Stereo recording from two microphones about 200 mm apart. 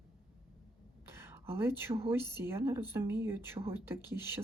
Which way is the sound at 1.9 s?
25° right (ahead or behind).